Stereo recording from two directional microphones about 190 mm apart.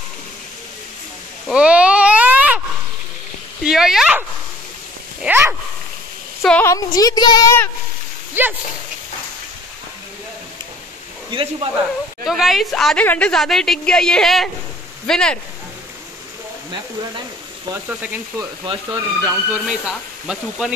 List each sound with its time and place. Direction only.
1.5 s a sound: 5° right (ahead or behind)
3.6 s a woman's voice: centre (ahead or behind)
5.2 s speech: 10° right (ahead or behind)
6.4 s speech: 10° left (ahead or behind)
8.4 s speech: 10° right (ahead or behind)
11.2 s speech: 25° right (ahead or behind)
12.3 s a woman's voice: centre (ahead or behind)
17.8 s speech: 10° right (ahead or behind)
18.7 s speech: 20° right (ahead or behind)
19.5 s a woman's voice: 5° right (ahead or behind)